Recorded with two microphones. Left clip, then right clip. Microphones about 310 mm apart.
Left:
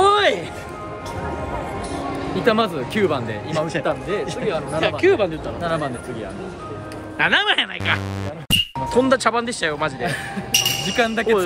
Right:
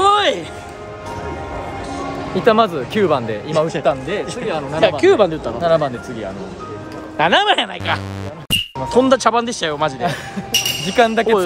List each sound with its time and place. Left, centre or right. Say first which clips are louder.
0.0 s music: right 2 dB; centre
2.4 s speech: right 5 dB; centre
4.7 s speech: right 6 dB; centre
7.2 s speech: right 4 dB; centre
8.5 s music: even; centre
8.8 s speech: right 6 dB; centre